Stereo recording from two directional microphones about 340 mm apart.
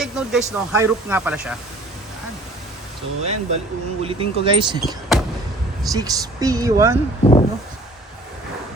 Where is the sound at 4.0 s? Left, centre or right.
Centre.